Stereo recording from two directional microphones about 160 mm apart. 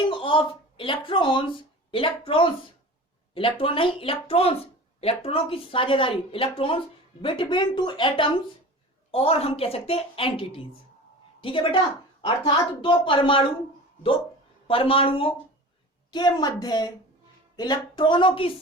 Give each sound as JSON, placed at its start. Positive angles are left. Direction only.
{"t": 0.0, "sound": "a woman's voice", "side_deg": 30}
{"t": 14.7, "sound": "speech", "side_deg": 35}